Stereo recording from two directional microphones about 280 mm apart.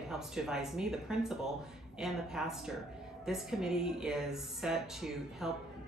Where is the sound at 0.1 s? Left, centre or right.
Centre.